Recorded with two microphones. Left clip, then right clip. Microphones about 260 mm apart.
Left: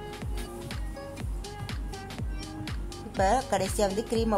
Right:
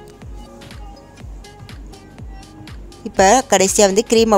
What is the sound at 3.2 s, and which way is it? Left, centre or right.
A woman's voice, right.